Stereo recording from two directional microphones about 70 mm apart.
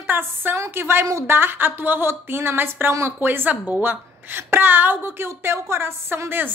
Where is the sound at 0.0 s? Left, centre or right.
Right.